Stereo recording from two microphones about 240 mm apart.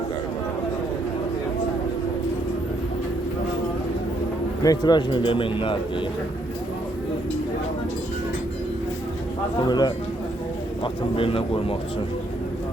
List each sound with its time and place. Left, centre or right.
4.6 s speech: centre
9.6 s a man's voice: centre
11.2 s speech: left